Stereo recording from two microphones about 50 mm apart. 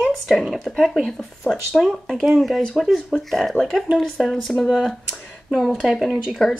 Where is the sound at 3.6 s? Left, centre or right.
Left.